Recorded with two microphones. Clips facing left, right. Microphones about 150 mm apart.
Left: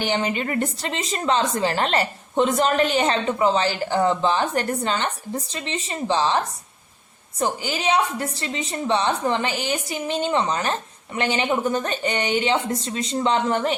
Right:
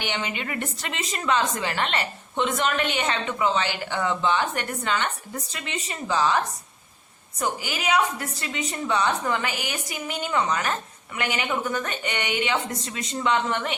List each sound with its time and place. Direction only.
0.0 s a woman's voice: 35° left (ahead or behind)